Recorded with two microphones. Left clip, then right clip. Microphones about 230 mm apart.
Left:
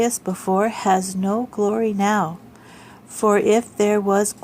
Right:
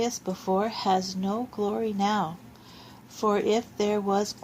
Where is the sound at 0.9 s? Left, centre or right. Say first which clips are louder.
Left 5 dB; left.